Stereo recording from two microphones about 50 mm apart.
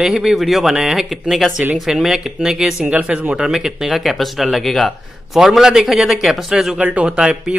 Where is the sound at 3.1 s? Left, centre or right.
Right.